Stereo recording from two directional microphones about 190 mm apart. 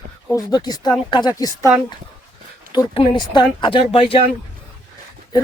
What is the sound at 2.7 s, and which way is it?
Speech, 25° left (ahead or behind).